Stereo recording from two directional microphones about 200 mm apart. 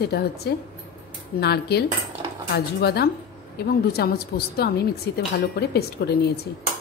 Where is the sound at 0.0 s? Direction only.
55° left (ahead or behind).